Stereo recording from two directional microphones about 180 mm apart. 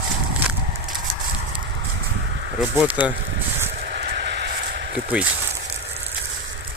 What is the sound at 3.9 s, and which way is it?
Vehicle, 65° right (ahead or behind).